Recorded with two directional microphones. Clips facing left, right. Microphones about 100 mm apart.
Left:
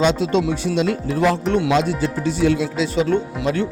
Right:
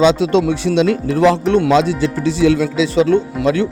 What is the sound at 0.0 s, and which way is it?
Speech, 85° right.